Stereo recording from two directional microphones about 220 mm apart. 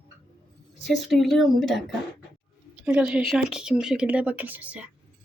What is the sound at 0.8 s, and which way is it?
Speech, centre (ahead or behind).